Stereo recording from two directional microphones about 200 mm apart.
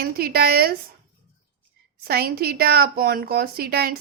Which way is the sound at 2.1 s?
50° right (ahead or behind).